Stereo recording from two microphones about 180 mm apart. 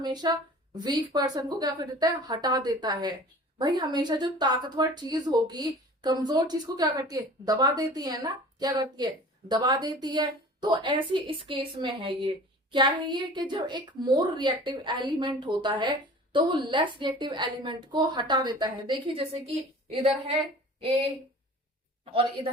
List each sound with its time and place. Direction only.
0.0 s a woman's voice: 25° right (ahead or behind)
22.4 s speech: 30° right (ahead or behind)